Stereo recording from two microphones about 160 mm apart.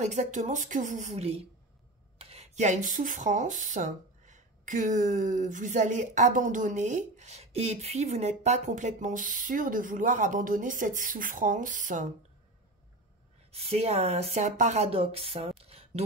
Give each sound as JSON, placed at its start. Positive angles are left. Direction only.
{"t": 0.0, "sound": "speech", "side_deg": -50}
{"t": 13.5, "sound": "speech", "side_deg": -40}